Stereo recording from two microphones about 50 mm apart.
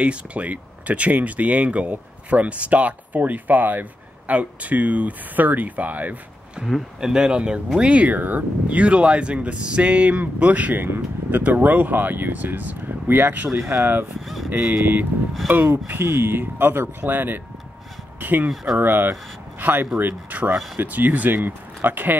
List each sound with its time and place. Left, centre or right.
0.0 s speech: right
7.0 s speech: centre; by 10.7 s right
10.7 s speech: right
14.2 s speech: centre
14.7 s speech: right